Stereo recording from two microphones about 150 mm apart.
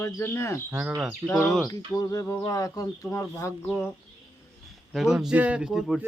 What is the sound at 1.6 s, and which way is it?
Speech, 25° left (ahead or behind).